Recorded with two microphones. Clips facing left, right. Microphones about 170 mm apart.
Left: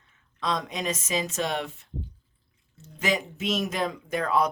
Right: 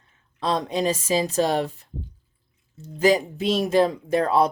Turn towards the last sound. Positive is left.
turn(degrees=-30)  # may be behind; listen again after turning